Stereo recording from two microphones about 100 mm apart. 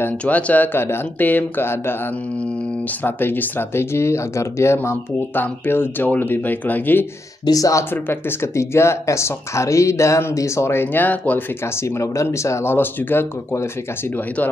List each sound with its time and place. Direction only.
0.0 s speech: 15° left (ahead or behind)
3.0 s speech: 20° left (ahead or behind)
7.4 s speech: 35° left (ahead or behind)
7.9 s speech: 25° left (ahead or behind)
11.8 s speech: 30° left (ahead or behind)